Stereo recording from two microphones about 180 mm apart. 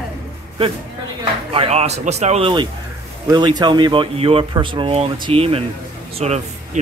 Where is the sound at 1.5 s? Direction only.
35° right (ahead or behind).